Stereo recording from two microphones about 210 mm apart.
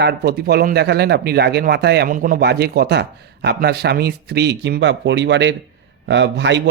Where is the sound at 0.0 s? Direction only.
50° right (ahead or behind).